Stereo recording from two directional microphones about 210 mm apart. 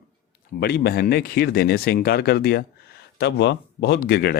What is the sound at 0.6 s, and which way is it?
Speech, 50° left (ahead or behind).